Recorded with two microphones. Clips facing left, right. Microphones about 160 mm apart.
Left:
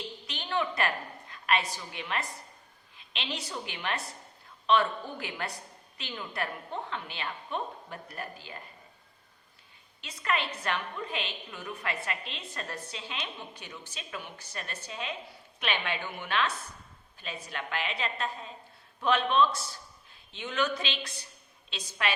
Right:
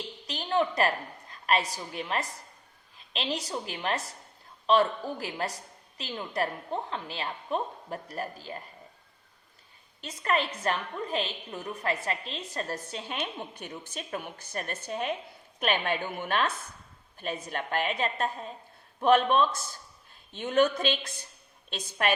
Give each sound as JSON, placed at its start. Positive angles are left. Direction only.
{"t": 0.3, "sound": "a woman's voice", "side_deg": -35}
{"t": 10.0, "sound": "a woman's voice", "side_deg": -45}